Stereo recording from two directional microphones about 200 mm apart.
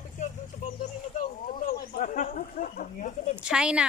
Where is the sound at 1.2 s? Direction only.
45° left (ahead or behind).